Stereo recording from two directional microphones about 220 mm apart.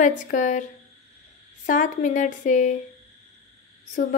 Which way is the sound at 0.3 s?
35° left (ahead or behind).